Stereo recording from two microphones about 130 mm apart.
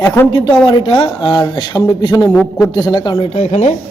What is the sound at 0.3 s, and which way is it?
Speech, 35° left (ahead or behind).